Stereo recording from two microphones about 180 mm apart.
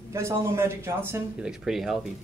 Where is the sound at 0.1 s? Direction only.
15° right (ahead or behind).